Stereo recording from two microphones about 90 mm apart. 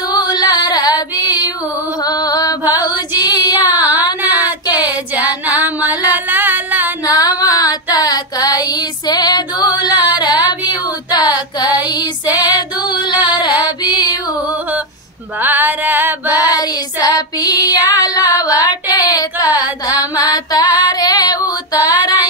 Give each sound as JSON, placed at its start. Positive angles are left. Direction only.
{"t": 0.1, "sound": "female singing", "side_deg": 50}
{"t": 2.0, "sound": "mantra", "side_deg": 45}
{"t": 2.7, "sound": "female singing", "side_deg": 50}
{"t": 3.8, "sound": "child singing", "side_deg": -20}
{"t": 5.6, "sound": "a sound", "side_deg": -20}
{"t": 7.1, "sound": "female singing", "side_deg": 45}
{"t": 10.1, "sound": "a sound", "side_deg": 50}
{"t": 10.6, "sound": "female singing", "side_deg": 50}
{"t": 15.4, "sound": "music", "side_deg": -20}
{"t": 16.4, "sound": "child singing", "side_deg": 45}
{"t": 19.9, "sound": "female singing", "side_deg": 45}